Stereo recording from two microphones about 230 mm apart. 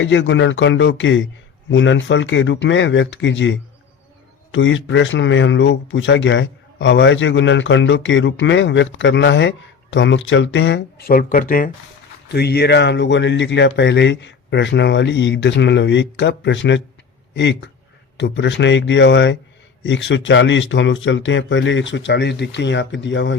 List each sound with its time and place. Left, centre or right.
0.0 s speech: left
4.5 s speech: left